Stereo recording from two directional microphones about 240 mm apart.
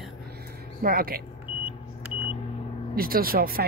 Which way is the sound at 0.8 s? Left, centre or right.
Right.